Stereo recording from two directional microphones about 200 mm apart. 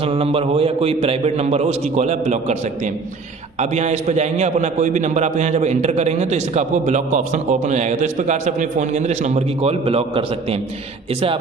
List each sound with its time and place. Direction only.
0.0 s a man's voice: 30° right (ahead or behind)
3.7 s a man's voice: 35° right (ahead or behind)